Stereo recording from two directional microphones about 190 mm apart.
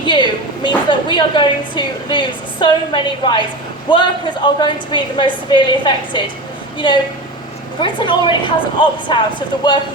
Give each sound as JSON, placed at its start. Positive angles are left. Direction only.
{"t": 0.0, "sound": "a woman's voice", "side_deg": 25}